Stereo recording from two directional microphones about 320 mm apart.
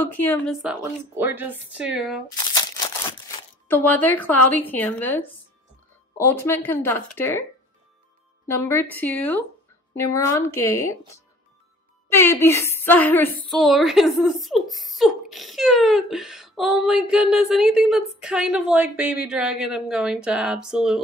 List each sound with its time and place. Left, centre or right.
0.0 s a woman's voice: centre
3.6 s a woman's voice: centre
8.5 s a woman's voice: centre
12.1 s a woman's voice: centre